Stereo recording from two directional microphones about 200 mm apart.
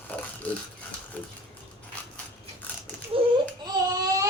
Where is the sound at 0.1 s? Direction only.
10° left (ahead or behind).